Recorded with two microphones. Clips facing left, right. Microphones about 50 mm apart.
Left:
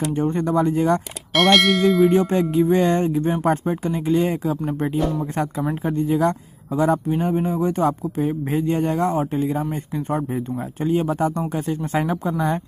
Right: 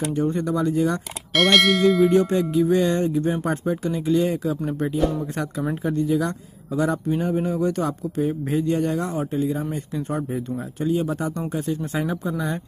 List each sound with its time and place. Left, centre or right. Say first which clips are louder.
0.1 s speech: left 3 dB; left
1.3 s bell: left 2 dB; centre
2.1 s a man's voice: left 1 dB; left
4.6 s a man's voice: left 1 dB; left
4.9 s bell: right 1 dB; centre
5.2 s a man's voice: left 3 dB; left; by 8.5 s centre
8.5 s a man's voice: left 2 dB; left